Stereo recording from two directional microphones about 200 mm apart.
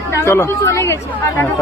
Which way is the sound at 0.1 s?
15° left (ahead or behind).